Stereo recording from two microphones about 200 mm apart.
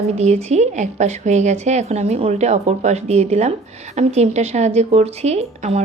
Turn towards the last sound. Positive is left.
turn(degrees=-30)  # may be behind; listen again after turning